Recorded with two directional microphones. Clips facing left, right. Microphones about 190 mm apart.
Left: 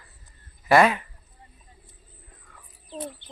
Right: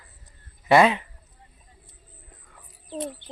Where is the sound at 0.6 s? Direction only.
20° right (ahead or behind).